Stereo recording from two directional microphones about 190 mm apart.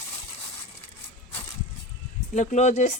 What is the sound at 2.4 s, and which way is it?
Speech, 40° left (ahead or behind).